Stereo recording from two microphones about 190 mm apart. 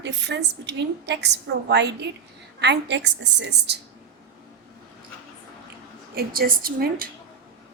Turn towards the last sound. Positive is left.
turn(degrees=-50)  # may be behind; listen again after turning